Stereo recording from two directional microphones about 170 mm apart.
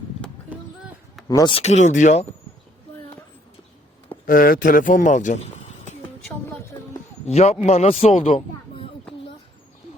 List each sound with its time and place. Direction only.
0.5 s a sound: 10° right (ahead or behind)
1.3 s speech: 20° left (ahead or behind)
1.5 s speech: 40° left (ahead or behind)
4.3 s speech: 55° left (ahead or behind)
7.3 s a man's voice: 40° left (ahead or behind)